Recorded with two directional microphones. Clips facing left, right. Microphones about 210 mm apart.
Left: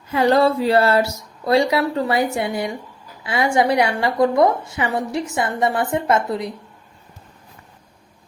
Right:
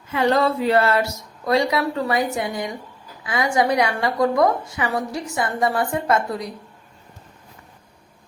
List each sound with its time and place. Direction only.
0.1 s a woman's voice: 35° left (ahead or behind)